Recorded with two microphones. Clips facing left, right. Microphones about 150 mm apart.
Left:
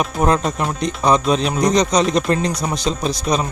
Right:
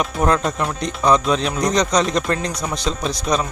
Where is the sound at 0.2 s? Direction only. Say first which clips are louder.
Left 1 dB; 25° left (ahead or behind).